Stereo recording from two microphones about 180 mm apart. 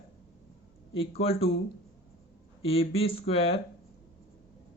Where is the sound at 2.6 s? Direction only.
30° left (ahead or behind).